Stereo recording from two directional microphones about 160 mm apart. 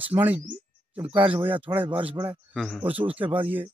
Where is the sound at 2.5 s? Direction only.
Centre (ahead or behind).